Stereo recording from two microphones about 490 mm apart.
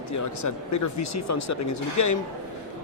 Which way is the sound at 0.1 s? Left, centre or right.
Left.